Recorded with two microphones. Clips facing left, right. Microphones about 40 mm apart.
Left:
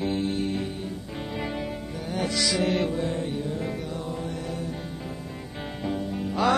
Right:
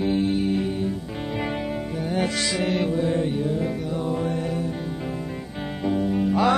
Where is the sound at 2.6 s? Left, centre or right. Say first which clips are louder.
Right 2 dB; centre.